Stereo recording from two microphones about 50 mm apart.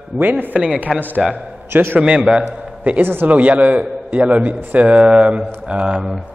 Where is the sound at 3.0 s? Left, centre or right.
Right.